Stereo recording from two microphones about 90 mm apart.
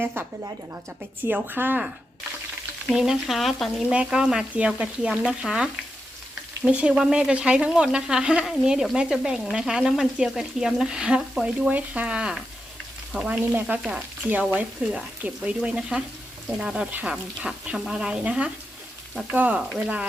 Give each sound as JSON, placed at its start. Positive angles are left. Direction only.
{"t": 0.0, "sound": "speech", "side_deg": -25}
{"t": 2.8, "sound": "speech", "side_deg": -5}
{"t": 3.8, "sound": "speech", "side_deg": -10}
{"t": 6.7, "sound": "speech", "side_deg": -15}
{"t": 13.7, "sound": "speech", "side_deg": -20}